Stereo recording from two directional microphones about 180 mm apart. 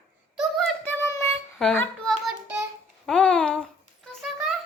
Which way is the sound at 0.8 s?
15° left (ahead or behind).